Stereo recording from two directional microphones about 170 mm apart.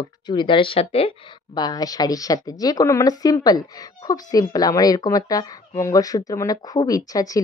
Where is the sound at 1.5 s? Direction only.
20° left (ahead or behind).